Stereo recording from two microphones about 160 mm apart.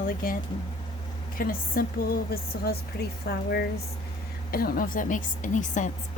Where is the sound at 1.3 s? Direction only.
65° left (ahead or behind).